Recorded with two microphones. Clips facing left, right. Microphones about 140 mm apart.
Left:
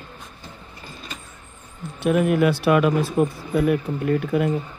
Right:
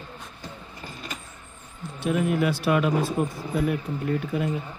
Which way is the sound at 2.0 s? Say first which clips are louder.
Left 5 dB; 60° left (ahead or behind).